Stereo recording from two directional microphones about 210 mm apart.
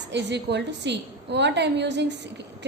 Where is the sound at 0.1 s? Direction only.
55° right (ahead or behind).